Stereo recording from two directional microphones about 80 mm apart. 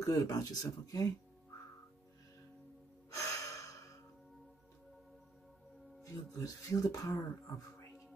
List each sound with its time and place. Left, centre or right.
0.0 s speech: left
3.2 s gasp: left
6.0 s speech: left